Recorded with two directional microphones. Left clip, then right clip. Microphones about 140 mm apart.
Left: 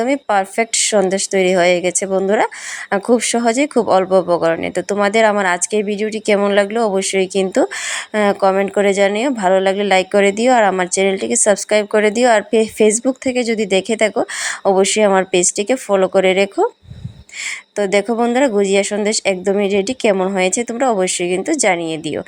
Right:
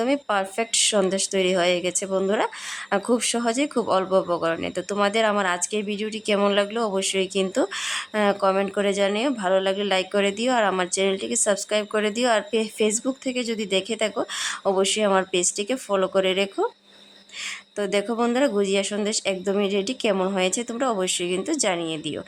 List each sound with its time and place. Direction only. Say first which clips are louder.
0.0 s speech: left 7 dB; 25° left (ahead or behind)
17.7 s speech: left 8 dB; 30° left (ahead or behind)